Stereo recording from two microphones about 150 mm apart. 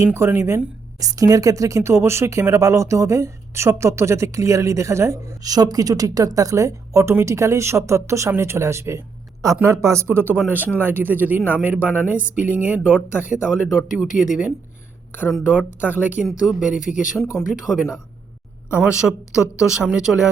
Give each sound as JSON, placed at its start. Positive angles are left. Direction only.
{"t": 0.0, "sound": "speech", "side_deg": -15}
{"t": 15.3, "sound": "speech", "side_deg": -5}
{"t": 16.7, "sound": "speech", "side_deg": 60}
{"t": 17.5, "sound": "speech", "side_deg": -5}